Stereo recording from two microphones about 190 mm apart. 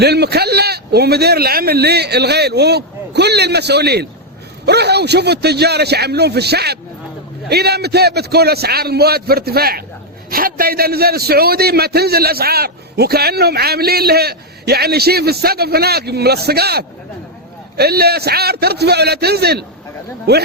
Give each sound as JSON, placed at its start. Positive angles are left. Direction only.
{"t": 0.0, "sound": "a man's voice", "side_deg": -60}